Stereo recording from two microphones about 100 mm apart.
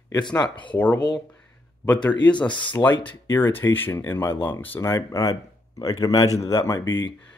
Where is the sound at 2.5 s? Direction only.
55° left (ahead or behind).